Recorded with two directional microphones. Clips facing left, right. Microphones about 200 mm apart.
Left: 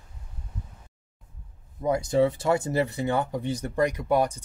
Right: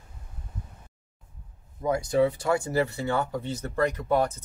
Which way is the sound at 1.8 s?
25° left (ahead or behind).